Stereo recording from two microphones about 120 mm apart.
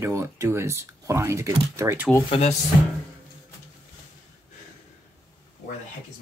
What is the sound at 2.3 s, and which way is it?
Speech, 60° left (ahead or behind).